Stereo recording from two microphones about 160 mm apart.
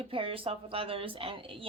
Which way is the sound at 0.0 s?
35° right (ahead or behind).